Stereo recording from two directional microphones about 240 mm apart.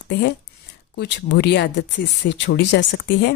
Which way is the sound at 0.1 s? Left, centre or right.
Left.